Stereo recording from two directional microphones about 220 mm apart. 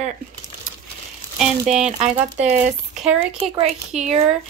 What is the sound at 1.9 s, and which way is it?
Speech, 30° right (ahead or behind).